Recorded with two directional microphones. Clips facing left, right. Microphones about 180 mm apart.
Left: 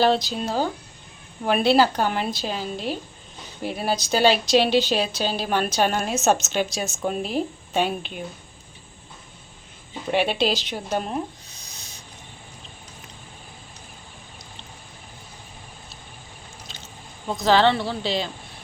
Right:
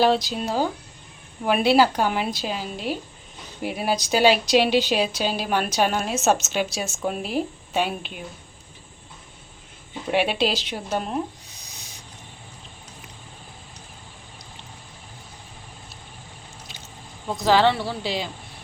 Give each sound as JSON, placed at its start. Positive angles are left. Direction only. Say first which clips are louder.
{"t": 0.0, "sound": "speech", "louder": "even", "side_deg": -10}
{"t": 10.1, "sound": "speech", "louder": "even", "side_deg": -5}
{"t": 11.4, "sound": "a sound", "louder": "even", "side_deg": -15}
{"t": 16.6, "sound": "speech", "louder": "even", "side_deg": -15}